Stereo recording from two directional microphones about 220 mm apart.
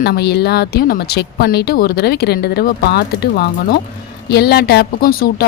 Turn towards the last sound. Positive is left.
turn(degrees=40)  # may be behind; listen again after turning